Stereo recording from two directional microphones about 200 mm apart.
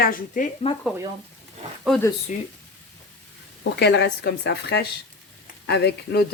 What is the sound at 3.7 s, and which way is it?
Speech, 60° left (ahead or behind).